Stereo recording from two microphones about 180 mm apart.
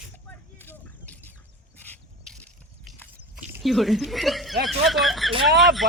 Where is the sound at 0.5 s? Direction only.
10° left (ahead or behind).